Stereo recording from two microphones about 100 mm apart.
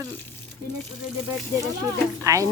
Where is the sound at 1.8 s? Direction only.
35° right (ahead or behind).